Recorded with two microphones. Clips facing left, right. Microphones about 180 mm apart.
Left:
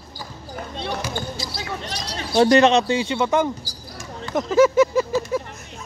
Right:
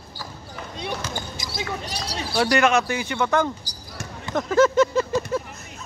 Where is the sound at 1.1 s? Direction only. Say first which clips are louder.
Left 3 dB; 15° right (ahead or behind).